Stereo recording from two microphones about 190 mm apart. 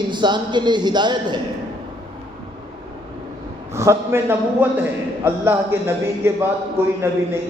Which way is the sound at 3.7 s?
15° right (ahead or behind).